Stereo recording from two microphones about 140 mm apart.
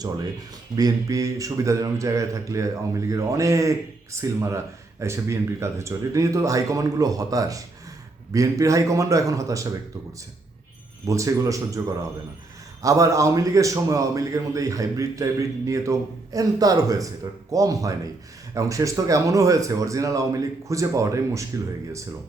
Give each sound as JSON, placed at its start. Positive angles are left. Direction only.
{"t": 0.8, "sound": "a man's voice", "side_deg": -25}
{"t": 11.0, "sound": "a man's voice", "side_deg": -20}
{"t": 12.8, "sound": "a man's voice", "side_deg": -20}